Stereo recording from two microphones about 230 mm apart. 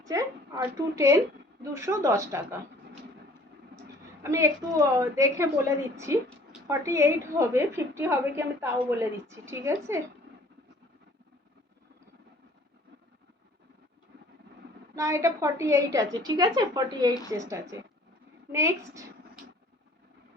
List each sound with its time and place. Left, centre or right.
0.0 s a woman's voice: centre
4.2 s a woman's voice: centre
14.9 s a woman's voice: centre